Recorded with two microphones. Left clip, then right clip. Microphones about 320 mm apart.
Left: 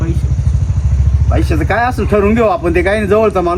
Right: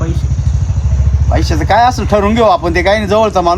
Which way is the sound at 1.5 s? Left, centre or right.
Centre.